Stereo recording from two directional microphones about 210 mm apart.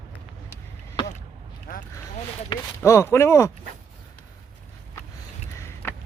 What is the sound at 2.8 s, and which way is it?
Speech, 10° left (ahead or behind).